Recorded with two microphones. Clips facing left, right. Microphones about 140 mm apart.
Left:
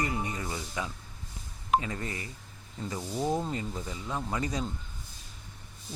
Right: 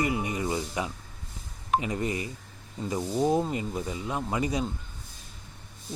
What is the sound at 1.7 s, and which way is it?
Speech, 15° right (ahead or behind).